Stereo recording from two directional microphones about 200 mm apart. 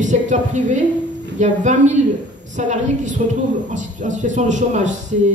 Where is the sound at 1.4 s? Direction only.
35° right (ahead or behind).